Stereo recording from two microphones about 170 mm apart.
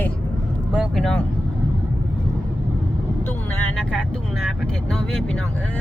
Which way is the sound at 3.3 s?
5° left (ahead or behind).